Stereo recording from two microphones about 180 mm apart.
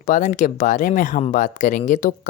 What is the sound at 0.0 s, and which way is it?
Speech, 45° left (ahead or behind).